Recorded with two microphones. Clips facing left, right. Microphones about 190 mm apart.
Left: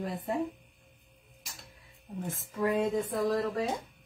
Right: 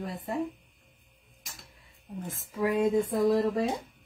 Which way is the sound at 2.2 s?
Centre (ahead or behind).